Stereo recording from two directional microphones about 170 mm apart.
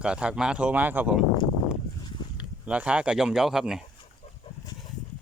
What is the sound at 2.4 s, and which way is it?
Speech, 5° right (ahead or behind).